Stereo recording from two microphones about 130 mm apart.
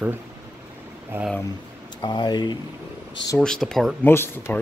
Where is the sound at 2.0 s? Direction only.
35° left (ahead or behind).